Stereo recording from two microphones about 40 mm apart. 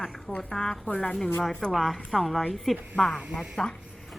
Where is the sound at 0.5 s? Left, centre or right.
Centre.